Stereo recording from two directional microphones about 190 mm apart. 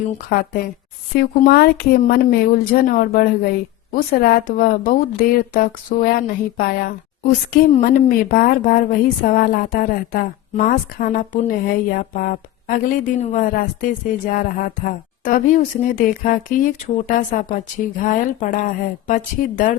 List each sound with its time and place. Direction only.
0.0 s a woman's voice: 50° left (ahead or behind)